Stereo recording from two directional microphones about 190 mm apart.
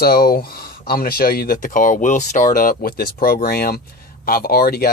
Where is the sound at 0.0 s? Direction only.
55° left (ahead or behind).